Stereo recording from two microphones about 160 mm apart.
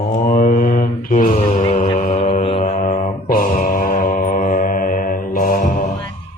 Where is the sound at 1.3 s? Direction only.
40° left (ahead or behind).